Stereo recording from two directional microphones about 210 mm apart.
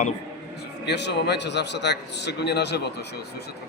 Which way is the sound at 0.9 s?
55° left (ahead or behind).